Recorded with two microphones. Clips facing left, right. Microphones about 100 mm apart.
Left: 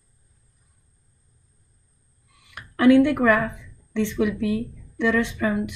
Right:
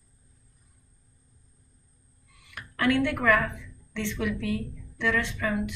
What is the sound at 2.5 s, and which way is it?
A woman's voice, 20° left (ahead or behind).